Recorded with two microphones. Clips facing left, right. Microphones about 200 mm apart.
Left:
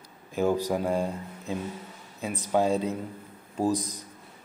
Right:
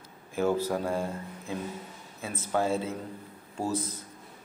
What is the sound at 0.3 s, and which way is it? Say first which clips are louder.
Speech: left 2 dB; 15° left (ahead or behind).